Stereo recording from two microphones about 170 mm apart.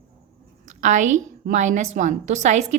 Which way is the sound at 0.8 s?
45° right (ahead or behind).